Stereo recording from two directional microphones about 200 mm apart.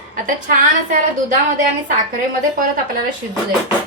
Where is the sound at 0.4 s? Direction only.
40° right (ahead or behind).